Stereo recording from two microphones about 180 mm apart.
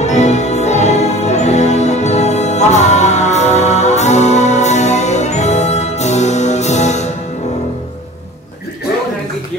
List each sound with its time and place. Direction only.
0.0 s music: 40° left (ahead or behind)